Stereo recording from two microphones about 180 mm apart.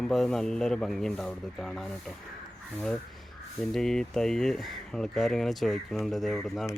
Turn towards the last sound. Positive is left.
turn(degrees=0)  # may be behind; listen again after turning